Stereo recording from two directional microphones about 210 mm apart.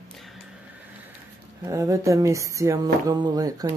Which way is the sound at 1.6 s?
15° right (ahead or behind).